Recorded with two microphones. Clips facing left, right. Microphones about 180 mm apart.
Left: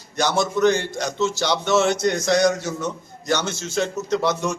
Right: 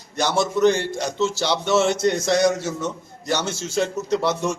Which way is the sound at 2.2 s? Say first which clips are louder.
Left 2 dB; 5° right (ahead or behind).